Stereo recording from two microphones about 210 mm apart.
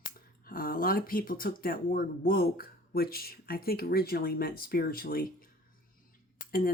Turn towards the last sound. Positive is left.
turn(degrees=45)  # may be behind; listen again after turning